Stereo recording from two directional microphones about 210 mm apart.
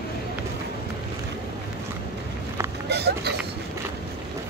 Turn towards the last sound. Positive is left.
turn(degrees=-50)  # may be behind; listen again after turning